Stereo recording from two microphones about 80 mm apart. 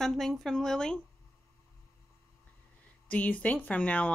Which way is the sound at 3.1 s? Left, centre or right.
Centre.